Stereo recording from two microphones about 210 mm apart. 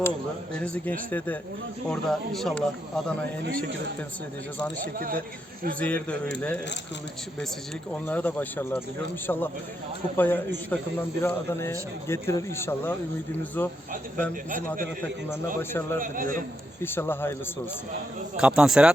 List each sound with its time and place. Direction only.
0.5 s speech: 5° left (ahead or behind)
4.9 s a man's voice: 40° right (ahead or behind)
5.8 s speech: 5° left (ahead or behind)
8.0 s speech: 10° left (ahead or behind)
15.0 s speech: 10° left (ahead or behind)
16.0 s a man's voice: 40° right (ahead or behind)
16.8 s speech: 10° left (ahead or behind)
18.3 s speech: 5° right (ahead or behind)